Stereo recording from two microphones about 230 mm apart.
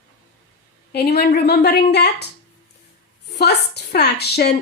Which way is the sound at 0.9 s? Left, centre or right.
Left.